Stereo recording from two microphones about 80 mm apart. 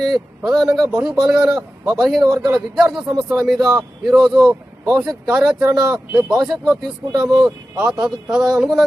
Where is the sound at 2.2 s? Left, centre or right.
Right.